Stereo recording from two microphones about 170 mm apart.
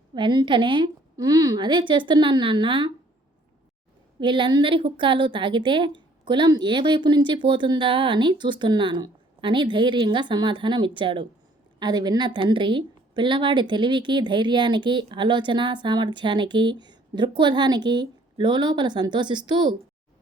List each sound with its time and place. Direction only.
0.1 s a woman's voice: 25° right (ahead or behind)
4.2 s a woman's voice: 30° right (ahead or behind)